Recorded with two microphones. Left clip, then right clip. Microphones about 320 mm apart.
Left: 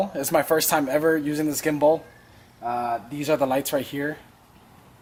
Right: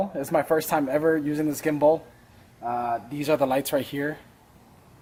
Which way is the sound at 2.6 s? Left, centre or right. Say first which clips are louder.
Left 1 dB; centre.